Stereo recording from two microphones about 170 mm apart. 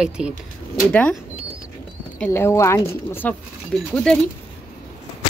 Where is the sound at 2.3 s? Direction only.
15° left (ahead or behind).